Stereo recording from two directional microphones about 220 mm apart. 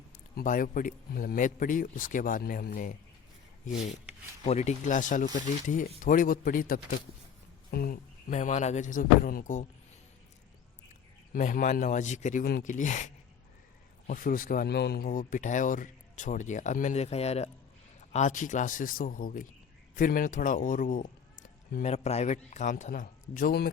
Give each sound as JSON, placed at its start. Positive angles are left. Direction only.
{"t": 0.3, "sound": "speech", "side_deg": 40}
{"t": 8.3, "sound": "speech", "side_deg": 30}
{"t": 10.8, "sound": "a man's voice", "side_deg": 35}
{"t": 14.1, "sound": "speech", "side_deg": 40}